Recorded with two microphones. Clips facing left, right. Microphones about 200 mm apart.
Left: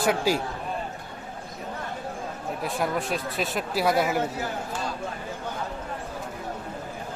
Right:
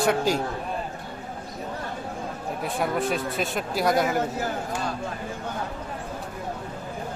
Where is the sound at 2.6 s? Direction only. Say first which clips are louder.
Right 2 dB; centre (ahead or behind).